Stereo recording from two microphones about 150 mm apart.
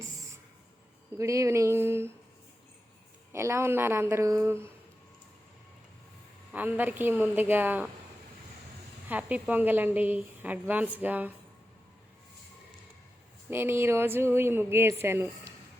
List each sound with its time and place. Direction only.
1.2 s a sound: 20° right (ahead or behind)
3.3 s a woman's voice: 20° right (ahead or behind)
6.5 s a woman's voice: 10° right (ahead or behind)
9.0 s a woman's voice: 10° right (ahead or behind)
13.5 s a woman's voice: 15° right (ahead or behind)